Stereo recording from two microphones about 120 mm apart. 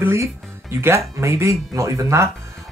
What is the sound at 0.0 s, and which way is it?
Speech, 20° right (ahead or behind).